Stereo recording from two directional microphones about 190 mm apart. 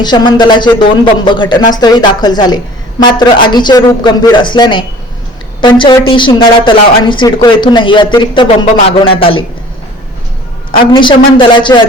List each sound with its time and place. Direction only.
0.0 s a woman's voice: 25° left (ahead or behind)
10.7 s a woman's voice: 25° left (ahead or behind)